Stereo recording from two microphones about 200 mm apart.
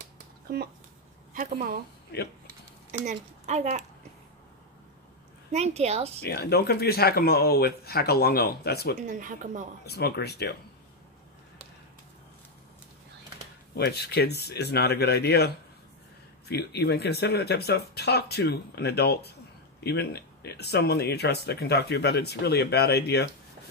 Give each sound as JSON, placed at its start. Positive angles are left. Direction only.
{"t": 2.1, "sound": "speech", "side_deg": 55}
{"t": 3.1, "sound": "a woman's voice", "side_deg": -35}
{"t": 5.5, "sound": "a woman's voice", "side_deg": -35}
{"t": 6.2, "sound": "speech", "side_deg": 50}
{"t": 9.0, "sound": "a woman's voice", "side_deg": -40}
{"t": 9.8, "sound": "speech", "side_deg": 55}
{"t": 13.7, "sound": "speech", "side_deg": 55}